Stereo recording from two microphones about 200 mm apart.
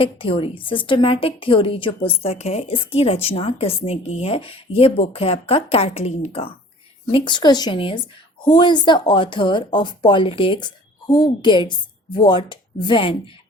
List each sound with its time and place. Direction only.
0.0 s a woman's voice: 25° left (ahead or behind)